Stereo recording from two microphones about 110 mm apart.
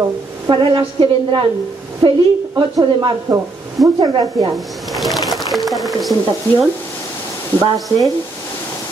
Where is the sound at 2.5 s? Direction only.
35° right (ahead or behind).